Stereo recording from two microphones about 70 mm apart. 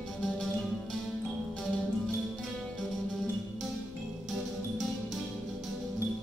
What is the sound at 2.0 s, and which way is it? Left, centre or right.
Music, centre.